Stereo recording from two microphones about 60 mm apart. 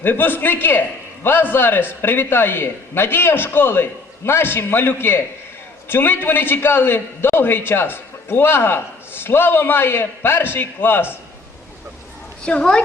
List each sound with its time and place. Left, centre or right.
0.0 s a man's voice: left
12.5 s a woman's voice: centre